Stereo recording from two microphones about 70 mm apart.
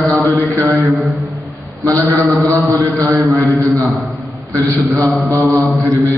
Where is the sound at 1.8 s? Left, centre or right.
Right.